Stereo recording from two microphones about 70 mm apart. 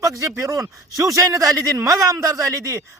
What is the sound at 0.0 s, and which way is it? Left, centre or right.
Speech, right.